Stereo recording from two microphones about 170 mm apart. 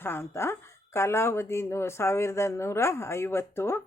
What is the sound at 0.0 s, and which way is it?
Speech, 15° left (ahead or behind).